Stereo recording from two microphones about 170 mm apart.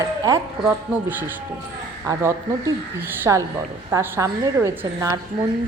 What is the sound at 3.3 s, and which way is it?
A woman's voice, 15° right (ahead or behind).